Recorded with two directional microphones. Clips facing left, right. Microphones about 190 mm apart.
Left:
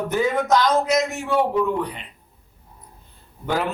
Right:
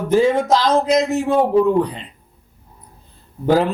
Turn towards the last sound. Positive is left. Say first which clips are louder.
# right 8 dB
turn(degrees=-35)  # may be behind; listen again after turning